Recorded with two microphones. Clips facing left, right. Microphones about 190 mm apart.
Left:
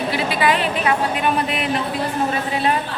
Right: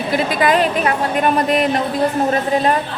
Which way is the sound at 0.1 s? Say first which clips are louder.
Right 5 dB; 45° right (ahead or behind).